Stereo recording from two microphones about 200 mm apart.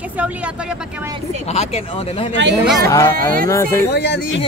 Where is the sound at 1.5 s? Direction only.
30° left (ahead or behind).